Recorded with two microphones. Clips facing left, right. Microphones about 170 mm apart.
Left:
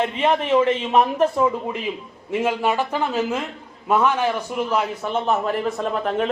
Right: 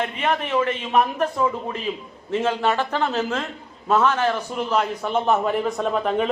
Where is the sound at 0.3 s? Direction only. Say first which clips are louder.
Left 4 dB; 25° left (ahead or behind).